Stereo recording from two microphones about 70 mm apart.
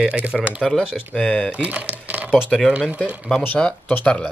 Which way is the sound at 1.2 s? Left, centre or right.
Centre.